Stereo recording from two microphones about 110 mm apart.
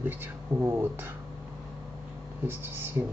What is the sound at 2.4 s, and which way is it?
Speech, 20° right (ahead or behind).